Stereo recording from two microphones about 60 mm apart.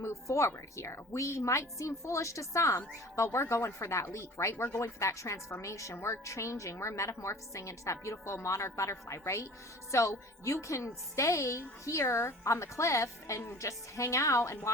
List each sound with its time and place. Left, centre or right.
0.0 s a sound: left
0.5 s a woman's voice: left
3.2 s a woman's voice: left